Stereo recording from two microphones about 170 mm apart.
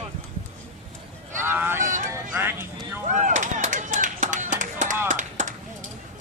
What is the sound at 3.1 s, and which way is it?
Run, 45° right (ahead or behind).